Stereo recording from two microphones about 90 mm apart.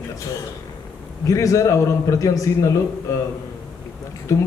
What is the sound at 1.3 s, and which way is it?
A man's voice, 40° left (ahead or behind).